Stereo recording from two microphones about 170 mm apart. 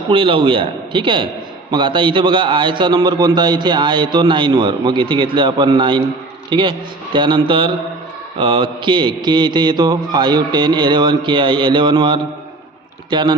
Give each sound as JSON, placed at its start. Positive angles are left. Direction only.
{"t": 0.1, "sound": "a man's voice", "side_deg": -30}